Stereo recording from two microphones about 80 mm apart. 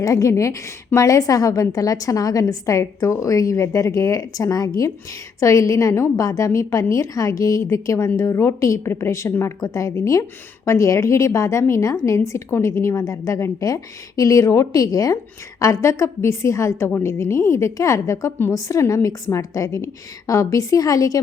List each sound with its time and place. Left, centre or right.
0.0 s a woman's voice: left
18.5 s a woman's voice: left